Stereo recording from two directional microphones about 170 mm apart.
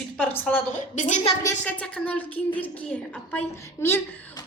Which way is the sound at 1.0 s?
45° left (ahead or behind).